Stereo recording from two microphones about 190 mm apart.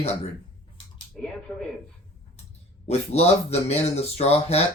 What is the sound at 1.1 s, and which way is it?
Speech, 5° left (ahead or behind).